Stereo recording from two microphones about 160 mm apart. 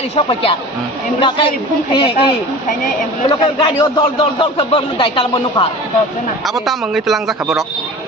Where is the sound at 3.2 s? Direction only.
30° left (ahead or behind).